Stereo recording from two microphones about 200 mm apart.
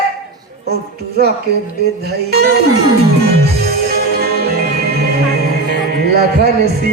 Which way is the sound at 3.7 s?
50° right (ahead or behind).